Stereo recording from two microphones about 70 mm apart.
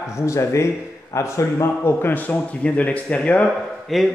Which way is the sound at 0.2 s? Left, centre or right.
Left.